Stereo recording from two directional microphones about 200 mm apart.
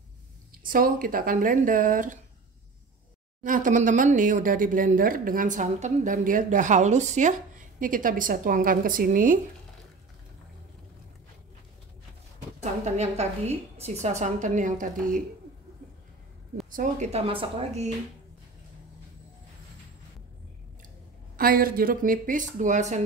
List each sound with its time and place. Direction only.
0.7 s speech: 45° right (ahead or behind)
3.4 s speech: 40° right (ahead or behind)
12.8 s speech: 35° right (ahead or behind)
16.7 s speech: 35° right (ahead or behind)
21.4 s speech: 45° right (ahead or behind)